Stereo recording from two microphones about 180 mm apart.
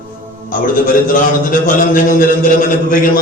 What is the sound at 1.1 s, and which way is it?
A man's voice, 50° left (ahead or behind).